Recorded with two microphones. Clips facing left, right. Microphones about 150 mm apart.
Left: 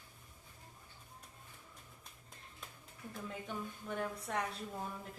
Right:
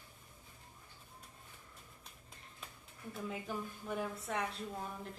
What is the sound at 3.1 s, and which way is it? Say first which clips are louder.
A woman's voice: right 2 dB; 5° right (ahead or behind).